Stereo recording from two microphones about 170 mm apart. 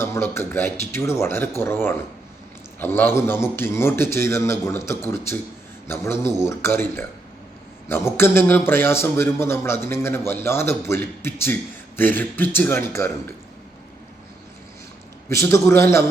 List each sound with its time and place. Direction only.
0.0 s a man's voice: 15° left (ahead or behind)
15.4 s a man's voice: 15° left (ahead or behind)